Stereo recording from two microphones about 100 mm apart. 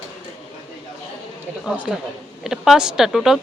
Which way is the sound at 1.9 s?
Centre (ahead or behind).